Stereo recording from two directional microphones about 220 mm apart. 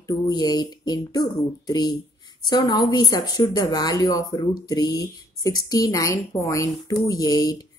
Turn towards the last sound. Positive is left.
turn(degrees=15)  # may be behind; listen again after turning